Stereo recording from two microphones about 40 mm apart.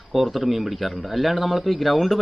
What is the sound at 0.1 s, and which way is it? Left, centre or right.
Speech, centre.